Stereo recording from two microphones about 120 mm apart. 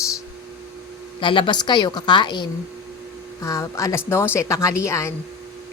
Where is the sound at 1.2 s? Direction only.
45° left (ahead or behind).